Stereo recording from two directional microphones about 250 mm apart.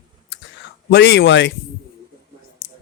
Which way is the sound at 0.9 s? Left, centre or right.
Left.